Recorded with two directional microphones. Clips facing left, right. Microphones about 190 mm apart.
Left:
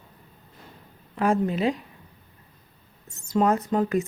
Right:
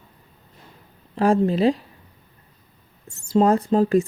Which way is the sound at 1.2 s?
30° right (ahead or behind).